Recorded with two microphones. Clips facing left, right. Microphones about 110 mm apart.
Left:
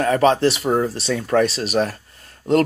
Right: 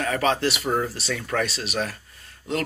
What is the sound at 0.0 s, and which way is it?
Speech, 40° left (ahead or behind).